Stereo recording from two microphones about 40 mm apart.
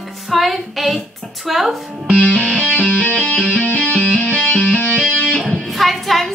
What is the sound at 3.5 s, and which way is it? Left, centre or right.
Music, left.